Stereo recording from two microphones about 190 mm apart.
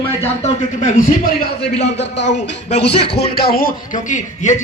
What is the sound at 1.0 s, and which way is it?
Speech, 50° left (ahead or behind).